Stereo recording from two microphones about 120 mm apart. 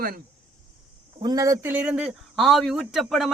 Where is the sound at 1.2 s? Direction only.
30° right (ahead or behind).